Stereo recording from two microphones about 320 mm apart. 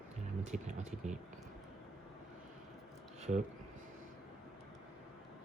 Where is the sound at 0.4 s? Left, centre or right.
Right.